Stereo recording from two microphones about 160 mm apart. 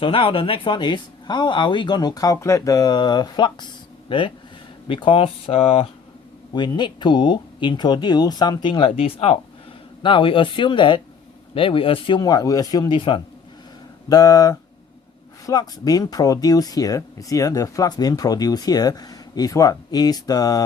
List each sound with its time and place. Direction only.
0.0 s speech: 35° left (ahead or behind)
6.5 s speech: 30° left (ahead or behind)